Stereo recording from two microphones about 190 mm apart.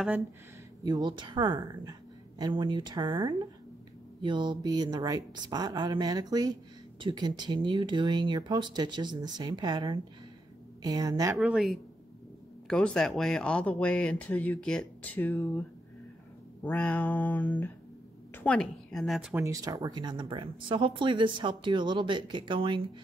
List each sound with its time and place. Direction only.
0.8 s a woman's voice: 25° right (ahead or behind)
11.3 s speech: centre (ahead or behind)
16.6 s a woman's voice: 10° left (ahead or behind)
19.3 s a woman's voice: 15° right (ahead or behind)